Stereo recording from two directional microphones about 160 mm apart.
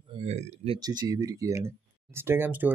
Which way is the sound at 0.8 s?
25° right (ahead or behind).